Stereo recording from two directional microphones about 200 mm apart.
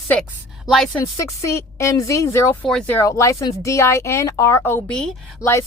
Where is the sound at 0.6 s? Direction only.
Centre (ahead or behind).